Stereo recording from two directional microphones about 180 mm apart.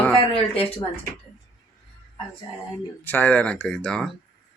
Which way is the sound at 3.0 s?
10° left (ahead or behind).